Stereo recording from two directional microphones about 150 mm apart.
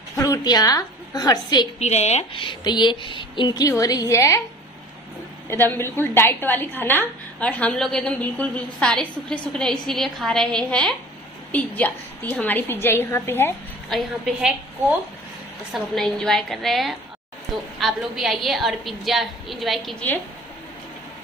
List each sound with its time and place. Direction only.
0.2 s a woman's voice: 25° left (ahead or behind)
1.8 s speech: 45° left (ahead or behind); by 4.4 s 20° left (ahead or behind)
5.5 s a woman's voice: 15° left (ahead or behind)
13.8 s a woman's voice: centre (ahead or behind)